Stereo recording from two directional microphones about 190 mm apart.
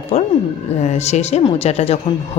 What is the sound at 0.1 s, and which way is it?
A woman's voice, 35° left (ahead or behind).